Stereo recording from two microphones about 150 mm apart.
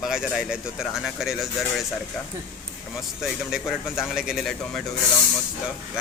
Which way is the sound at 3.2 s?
5° right (ahead or behind).